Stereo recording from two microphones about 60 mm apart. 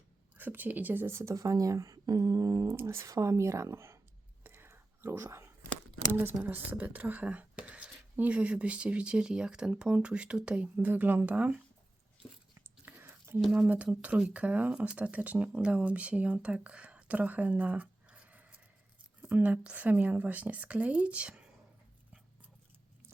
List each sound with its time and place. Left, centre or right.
0.3 s speech: right
1.0 s speech: right
2.6 s speech: right
3.1 s a woman's voice: right
4.4 s whispering: right
6.4 s speech: right
10.8 s speech: right
12.8 s whispering: right
13.7 s speech: right